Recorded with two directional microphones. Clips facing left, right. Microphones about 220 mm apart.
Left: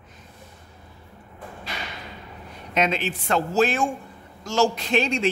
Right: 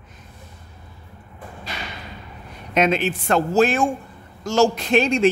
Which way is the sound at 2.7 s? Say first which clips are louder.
Right 5 dB; 50° right (ahead or behind).